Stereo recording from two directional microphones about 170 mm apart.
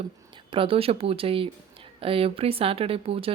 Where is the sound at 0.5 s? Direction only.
30° right (ahead or behind).